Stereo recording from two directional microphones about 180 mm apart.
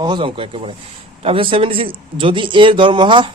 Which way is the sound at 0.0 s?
25° right (ahead or behind).